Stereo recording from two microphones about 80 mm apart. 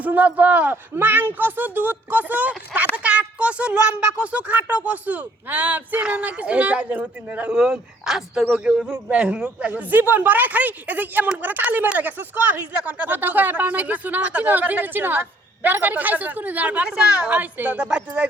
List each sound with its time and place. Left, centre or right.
0.0 s speech: right
7.5 s speech: centre